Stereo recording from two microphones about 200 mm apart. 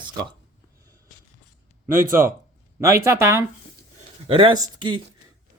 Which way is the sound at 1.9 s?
45° right (ahead or behind).